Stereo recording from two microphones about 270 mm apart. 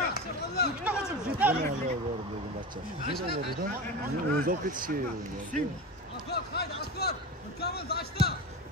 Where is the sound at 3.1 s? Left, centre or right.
Left.